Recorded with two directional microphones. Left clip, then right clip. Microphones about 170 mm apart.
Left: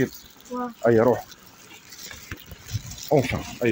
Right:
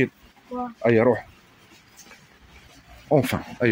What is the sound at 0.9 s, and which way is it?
Speech, 35° right (ahead or behind).